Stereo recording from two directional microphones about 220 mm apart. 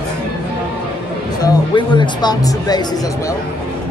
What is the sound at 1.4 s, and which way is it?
Speech, 20° left (ahead or behind).